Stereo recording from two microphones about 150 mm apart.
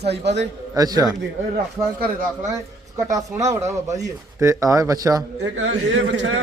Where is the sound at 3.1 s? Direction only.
25° right (ahead or behind).